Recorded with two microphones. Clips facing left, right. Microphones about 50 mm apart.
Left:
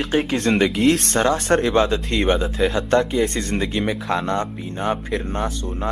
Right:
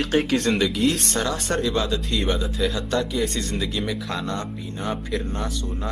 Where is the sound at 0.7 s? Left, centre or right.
Left.